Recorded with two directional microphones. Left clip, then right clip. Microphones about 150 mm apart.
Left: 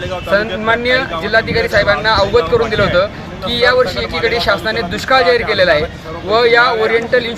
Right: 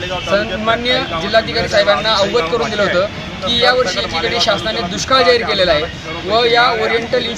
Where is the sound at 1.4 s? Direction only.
15° left (ahead or behind).